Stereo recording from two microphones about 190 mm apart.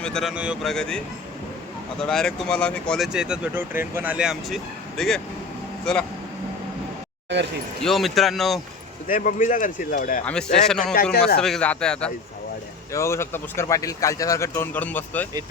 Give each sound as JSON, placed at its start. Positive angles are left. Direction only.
{"t": 0.0, "sound": "speech", "side_deg": 5}
{"t": 7.8, "sound": "speech", "side_deg": 0}
{"t": 9.0, "sound": "speech", "side_deg": 45}
{"t": 10.7, "sound": "speech", "side_deg": 0}
{"t": 10.9, "sound": "a man's voice", "side_deg": 55}
{"t": 11.3, "sound": "speech", "side_deg": 5}